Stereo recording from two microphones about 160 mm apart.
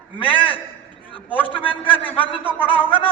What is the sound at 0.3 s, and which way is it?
A man's voice, 30° left (ahead or behind).